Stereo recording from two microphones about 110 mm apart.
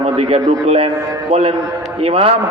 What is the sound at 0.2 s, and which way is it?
A man's voice, 60° right (ahead or behind).